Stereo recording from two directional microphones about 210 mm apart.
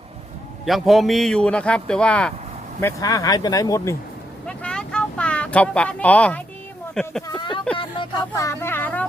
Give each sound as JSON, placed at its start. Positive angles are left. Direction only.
{"t": 0.6, "sound": "a man's voice", "side_deg": 0}
{"t": 2.8, "sound": "speech", "side_deg": 15}
{"t": 4.4, "sound": "vehicle", "side_deg": 5}
{"t": 6.9, "sound": "a man's voice", "side_deg": 5}
{"t": 7.3, "sound": "speech", "side_deg": 20}